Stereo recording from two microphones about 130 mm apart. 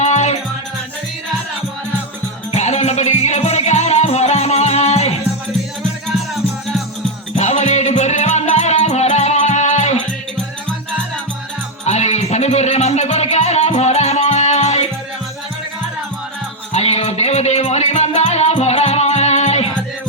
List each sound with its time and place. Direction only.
0.0 s music: 60° left (ahead or behind)
2.5 s music: 60° left (ahead or behind)
7.3 s music: 60° left (ahead or behind)
11.9 s music: 60° left (ahead or behind)
16.7 s music: 55° left (ahead or behind)